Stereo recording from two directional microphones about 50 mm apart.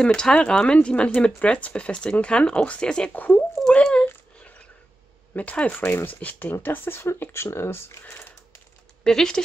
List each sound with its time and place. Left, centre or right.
0.0 s speech: centre
3.1 s speech: left
3.8 s a sound: left
5.3 s speech: left
5.8 s speech: left
9.0 s speech: centre